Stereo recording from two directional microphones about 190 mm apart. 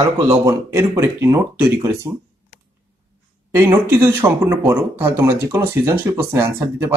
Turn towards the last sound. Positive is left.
turn(degrees=-15)  # may be behind; listen again after turning